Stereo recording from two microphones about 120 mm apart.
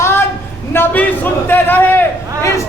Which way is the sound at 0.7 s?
15° left (ahead or behind).